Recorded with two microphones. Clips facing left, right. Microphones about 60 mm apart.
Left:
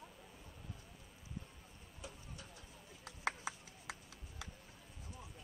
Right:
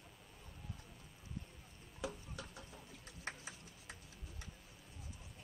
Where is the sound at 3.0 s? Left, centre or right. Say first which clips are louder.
Left 8 dB; left.